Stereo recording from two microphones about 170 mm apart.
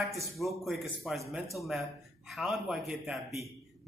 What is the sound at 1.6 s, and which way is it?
Speech, 15° right (ahead or behind).